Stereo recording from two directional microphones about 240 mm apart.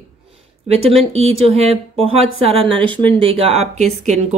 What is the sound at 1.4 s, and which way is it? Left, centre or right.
Speech, right.